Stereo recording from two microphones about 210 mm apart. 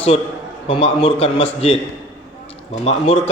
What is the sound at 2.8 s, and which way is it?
Speech, 30° left (ahead or behind).